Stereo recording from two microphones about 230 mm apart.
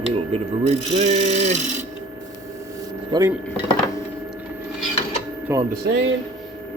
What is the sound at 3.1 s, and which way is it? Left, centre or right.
Speech, centre.